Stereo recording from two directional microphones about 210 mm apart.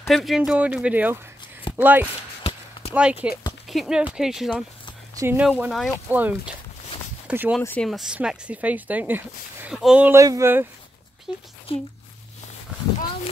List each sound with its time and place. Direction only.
0.1 s speech: centre (ahead or behind)
7.6 s speech: 5° left (ahead or behind)
11.7 s speech: 25° left (ahead or behind)